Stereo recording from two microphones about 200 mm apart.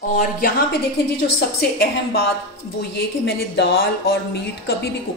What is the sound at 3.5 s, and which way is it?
Speech, 55° left (ahead or behind).